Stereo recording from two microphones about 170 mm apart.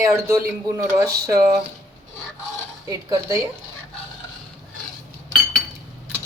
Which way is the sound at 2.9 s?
20° right (ahead or behind).